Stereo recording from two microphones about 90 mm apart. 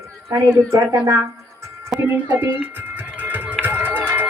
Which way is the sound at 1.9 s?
5° right (ahead or behind).